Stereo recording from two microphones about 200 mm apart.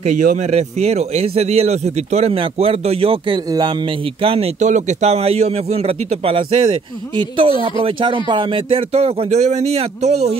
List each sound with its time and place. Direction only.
0.0 s a man's voice: 40° right (ahead or behind)